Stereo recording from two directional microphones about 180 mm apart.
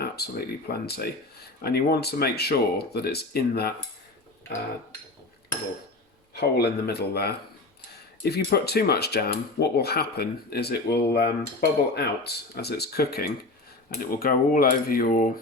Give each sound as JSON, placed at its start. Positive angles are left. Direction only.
{"t": 0.0, "sound": "speech", "side_deg": 60}
{"t": 6.3, "sound": "speech", "side_deg": 65}